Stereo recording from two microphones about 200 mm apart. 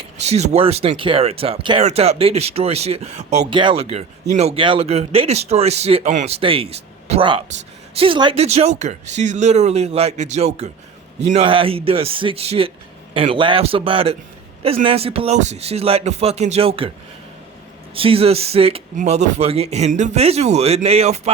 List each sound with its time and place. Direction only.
0.0 s speech: 35° right (ahead or behind)
17.9 s speech: 25° right (ahead or behind)